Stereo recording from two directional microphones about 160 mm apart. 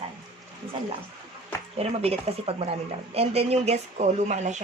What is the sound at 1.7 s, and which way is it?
Speech, 40° right (ahead or behind).